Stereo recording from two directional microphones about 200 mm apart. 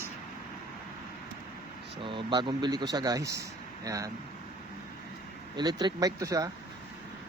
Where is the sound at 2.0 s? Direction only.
25° right (ahead or behind).